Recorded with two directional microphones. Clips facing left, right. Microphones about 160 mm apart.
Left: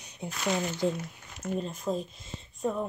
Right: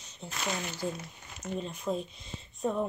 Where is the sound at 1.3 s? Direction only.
Centre (ahead or behind).